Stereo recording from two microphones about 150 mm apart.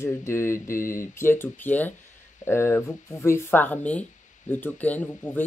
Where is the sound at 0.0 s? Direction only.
15° left (ahead or behind).